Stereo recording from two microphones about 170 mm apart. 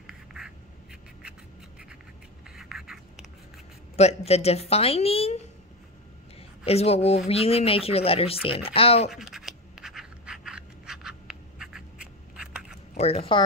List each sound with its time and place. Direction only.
0.0 s duck: centre (ahead or behind)
2.5 s writing: centre (ahead or behind)
3.9 s speech: 40° left (ahead or behind)
6.6 s speech: 35° left (ahead or behind)
9.1 s scratch: centre (ahead or behind)
12.9 s speech: 35° left (ahead or behind)